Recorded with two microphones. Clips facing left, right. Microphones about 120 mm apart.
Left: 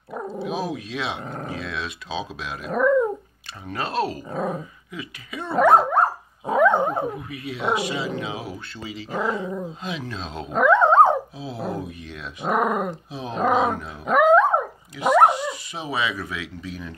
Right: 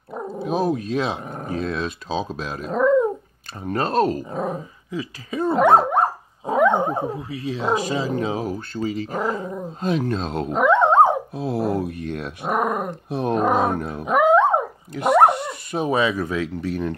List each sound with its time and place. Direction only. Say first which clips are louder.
0.4 s speech: right 7 dB; 45° right (ahead or behind)
2.7 s speech: right 2 dB; 20° right (ahead or behind)
3.6 s speech: right 6 dB; 45° right (ahead or behind)
4.3 s speech: right 1 dB; 20° right (ahead or behind)
5.5 s dog: right 1 dB; 25° right (ahead or behind)
6.7 s speech: even; 15° right (ahead or behind)
7.1 s speech: right 3 dB; 30° right (ahead or behind); by 10.5 s 50° right (ahead or behind)
10.5 s dog: even; 20° right (ahead or behind)
11.3 s speech: right 7 dB; 60° right (ahead or behind)
12.4 s speech: left 1 dB; 10° right (ahead or behind)
13.1 s speech: right 3 dB; 60° right (ahead or behind)
14.0 s dog: even; 15° right (ahead or behind)
15.2 s speech: right 1 dB; 55° right (ahead or behind)
16.6 s speech: right 10 dB; 55° right (ahead or behind)